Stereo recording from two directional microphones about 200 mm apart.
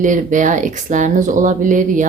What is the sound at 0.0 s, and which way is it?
Speech, 40° right (ahead or behind).